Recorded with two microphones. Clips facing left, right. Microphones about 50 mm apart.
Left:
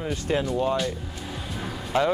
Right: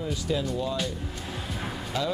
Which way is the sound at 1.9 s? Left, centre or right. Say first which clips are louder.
Left 7 dB; left.